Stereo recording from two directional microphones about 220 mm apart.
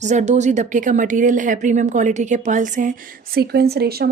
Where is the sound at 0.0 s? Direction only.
30° right (ahead or behind).